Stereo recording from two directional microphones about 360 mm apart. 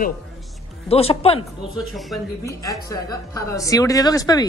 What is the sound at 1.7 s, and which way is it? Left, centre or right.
A woman's voice, centre.